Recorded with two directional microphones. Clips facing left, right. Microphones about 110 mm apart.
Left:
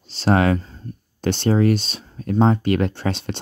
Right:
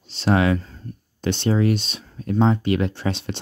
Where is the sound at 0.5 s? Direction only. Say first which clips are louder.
Even; 25° left (ahead or behind).